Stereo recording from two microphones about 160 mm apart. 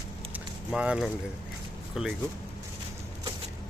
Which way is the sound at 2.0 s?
5° right (ahead or behind).